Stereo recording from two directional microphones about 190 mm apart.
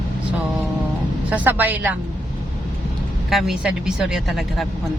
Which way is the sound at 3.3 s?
Centre (ahead or behind).